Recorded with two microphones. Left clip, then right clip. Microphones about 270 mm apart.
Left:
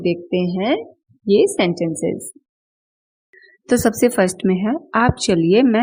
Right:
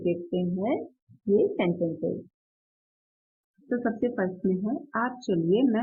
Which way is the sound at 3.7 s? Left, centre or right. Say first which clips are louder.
Left 12 dB; left.